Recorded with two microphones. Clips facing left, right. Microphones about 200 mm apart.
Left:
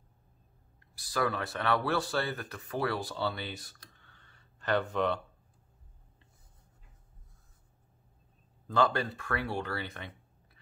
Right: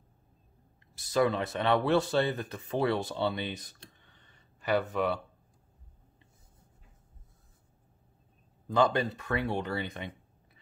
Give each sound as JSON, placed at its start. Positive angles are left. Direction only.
{"t": 0.9, "sound": "speech", "side_deg": -20}
{"t": 8.6, "sound": "speech", "side_deg": -15}